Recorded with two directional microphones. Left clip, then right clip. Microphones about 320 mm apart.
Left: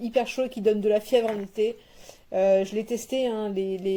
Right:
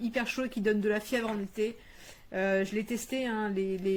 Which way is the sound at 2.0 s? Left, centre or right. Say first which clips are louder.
Left 9 dB; right.